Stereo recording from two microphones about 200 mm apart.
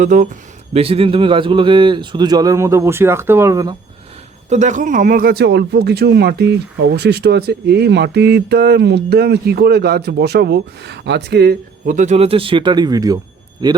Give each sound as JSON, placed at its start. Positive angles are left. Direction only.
{"t": 0.0, "sound": "speech", "side_deg": -40}
{"t": 4.4, "sound": "speech", "side_deg": -35}